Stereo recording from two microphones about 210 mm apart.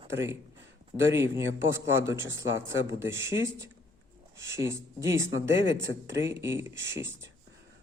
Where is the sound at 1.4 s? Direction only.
65° right (ahead or behind).